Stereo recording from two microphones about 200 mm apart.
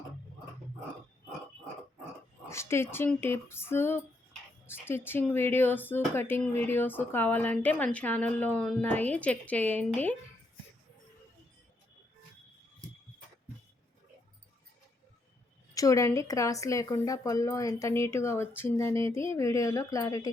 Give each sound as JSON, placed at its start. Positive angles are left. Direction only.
{"t": 2.5, "sound": "speech", "side_deg": 15}
{"t": 15.7, "sound": "speech", "side_deg": 15}